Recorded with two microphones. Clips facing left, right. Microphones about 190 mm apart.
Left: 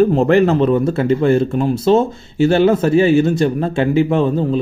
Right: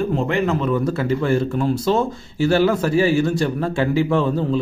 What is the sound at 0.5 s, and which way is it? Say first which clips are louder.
Speech: left 6 dB; 25° left (ahead or behind).